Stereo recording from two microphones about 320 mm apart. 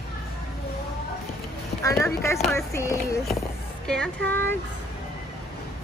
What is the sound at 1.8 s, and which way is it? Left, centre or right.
Speech, centre.